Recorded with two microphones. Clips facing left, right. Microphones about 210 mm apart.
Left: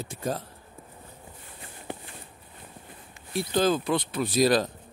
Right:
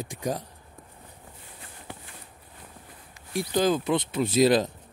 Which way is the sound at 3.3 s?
15° right (ahead or behind).